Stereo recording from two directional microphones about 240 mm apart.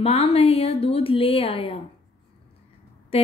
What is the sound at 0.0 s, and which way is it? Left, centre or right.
Speech, left.